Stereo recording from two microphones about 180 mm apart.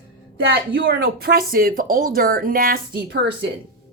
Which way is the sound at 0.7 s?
75° right (ahead or behind).